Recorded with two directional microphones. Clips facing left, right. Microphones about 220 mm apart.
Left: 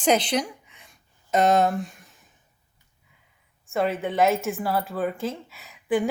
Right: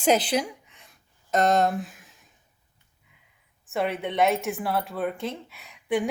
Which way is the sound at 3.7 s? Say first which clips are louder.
Left 2 dB; centre (ahead or behind).